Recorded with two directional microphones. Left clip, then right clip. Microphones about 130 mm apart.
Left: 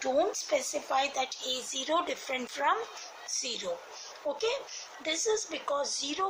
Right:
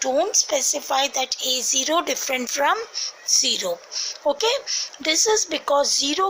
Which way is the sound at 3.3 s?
45° right (ahead or behind).